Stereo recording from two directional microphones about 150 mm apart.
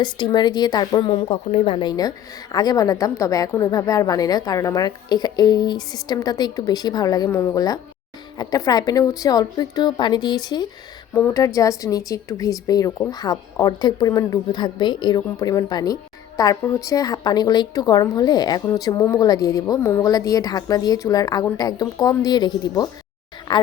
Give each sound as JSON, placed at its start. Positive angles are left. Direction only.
{"t": 0.0, "sound": "speech", "side_deg": 30}